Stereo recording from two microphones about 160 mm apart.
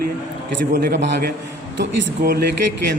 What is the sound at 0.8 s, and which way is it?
Speech, 90° right.